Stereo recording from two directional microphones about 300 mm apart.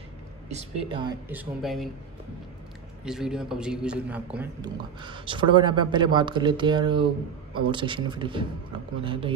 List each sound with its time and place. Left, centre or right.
0.5 s a man's voice: right
1.3 s speech: centre
3.0 s a man's voice: centre